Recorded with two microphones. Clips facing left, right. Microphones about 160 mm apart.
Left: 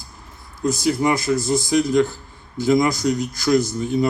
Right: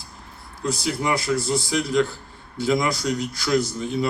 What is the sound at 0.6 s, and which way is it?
A man's voice, 45° left (ahead or behind).